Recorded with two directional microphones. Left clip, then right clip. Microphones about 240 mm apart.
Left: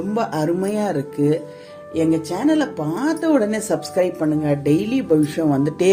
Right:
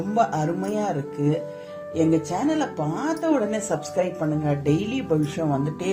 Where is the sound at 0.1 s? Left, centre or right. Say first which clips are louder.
Left 1 dB; left.